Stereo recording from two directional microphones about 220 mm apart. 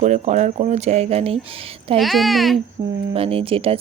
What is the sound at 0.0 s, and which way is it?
Speech, 30° right (ahead or behind).